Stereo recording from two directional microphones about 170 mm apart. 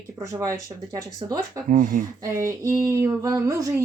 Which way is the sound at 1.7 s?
50° right (ahead or behind).